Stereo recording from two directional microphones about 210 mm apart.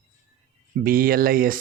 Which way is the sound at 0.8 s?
40° right (ahead or behind).